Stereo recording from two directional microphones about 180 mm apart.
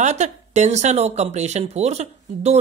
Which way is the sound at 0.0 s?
40° right (ahead or behind).